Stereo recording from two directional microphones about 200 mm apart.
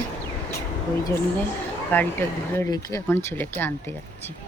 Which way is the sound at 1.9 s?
10° left (ahead or behind).